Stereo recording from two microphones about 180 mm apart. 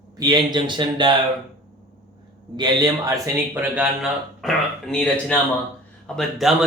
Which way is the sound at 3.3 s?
10° right (ahead or behind).